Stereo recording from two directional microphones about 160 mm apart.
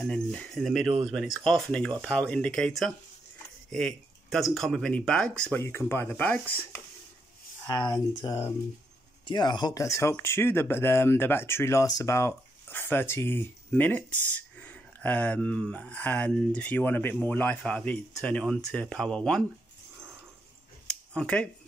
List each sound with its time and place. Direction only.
0.0 s speech: 5° left (ahead or behind)
5.6 s speech: 15° left (ahead or behind)
7.6 s speech: 25° left (ahead or behind); by 19.4 s 5° left (ahead or behind)
20.8 s a sound: 5° left (ahead or behind)